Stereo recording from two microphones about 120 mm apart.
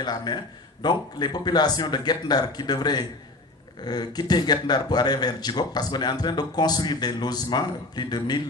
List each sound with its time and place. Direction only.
0.0 s speech: 35° left (ahead or behind)